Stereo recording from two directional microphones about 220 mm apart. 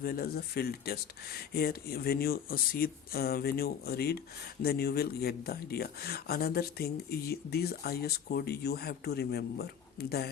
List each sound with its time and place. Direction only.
0.0 s speech: 40° left (ahead or behind)